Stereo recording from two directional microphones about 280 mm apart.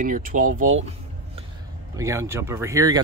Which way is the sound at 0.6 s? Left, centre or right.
Right.